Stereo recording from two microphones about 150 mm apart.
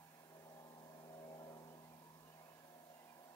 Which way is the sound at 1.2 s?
30° left (ahead or behind).